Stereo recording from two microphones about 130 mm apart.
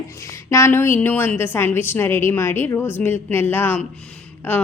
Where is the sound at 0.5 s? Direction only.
20° left (ahead or behind).